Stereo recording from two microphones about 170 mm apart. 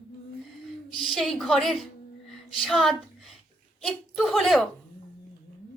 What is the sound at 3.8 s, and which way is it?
Speech, centre (ahead or behind).